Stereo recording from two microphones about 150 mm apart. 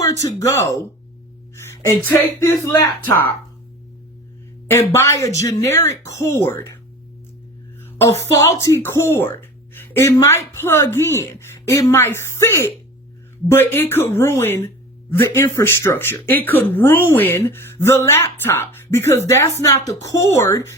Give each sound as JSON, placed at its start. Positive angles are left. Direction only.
{"t": 0.0, "sound": "speech", "side_deg": 20}
{"t": 2.4, "sound": "speech", "side_deg": 20}
{"t": 4.7, "sound": "speech", "side_deg": 15}
{"t": 7.8, "sound": "a sound", "side_deg": 15}
{"t": 8.2, "sound": "speech", "side_deg": 20}